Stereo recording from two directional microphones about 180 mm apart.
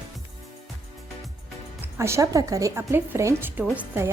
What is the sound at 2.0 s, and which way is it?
A woman's voice, 15° right (ahead or behind).